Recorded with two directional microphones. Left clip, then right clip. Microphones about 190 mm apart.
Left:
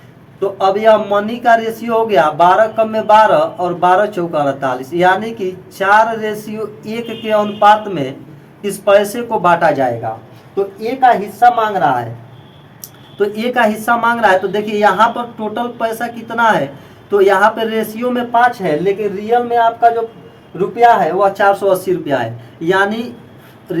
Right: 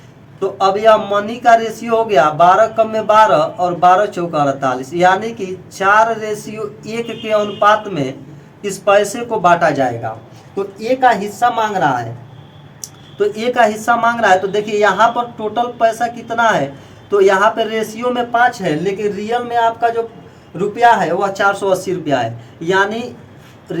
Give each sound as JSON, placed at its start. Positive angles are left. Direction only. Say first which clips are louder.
{"t": 0.3, "sound": "a woman's voice", "louder": "left 1 dB", "side_deg": -5}
{"t": 11.3, "sound": "a woman's voice", "louder": "left 4 dB", "side_deg": -15}
{"t": 13.1, "sound": "a woman's voice", "louder": "right 1 dB", "side_deg": 0}
{"t": 19.2, "sound": "a woman's voice", "louder": "left 4 dB", "side_deg": -15}
{"t": 21.3, "sound": "a woman's voice", "louder": "left 3 dB", "side_deg": 0}